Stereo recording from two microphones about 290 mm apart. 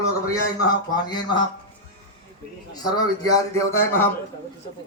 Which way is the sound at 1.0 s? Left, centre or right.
Centre.